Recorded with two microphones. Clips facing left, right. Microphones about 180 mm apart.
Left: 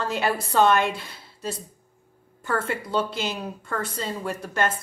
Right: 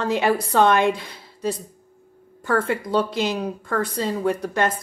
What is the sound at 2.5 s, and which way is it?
A woman's voice, 15° right (ahead or behind).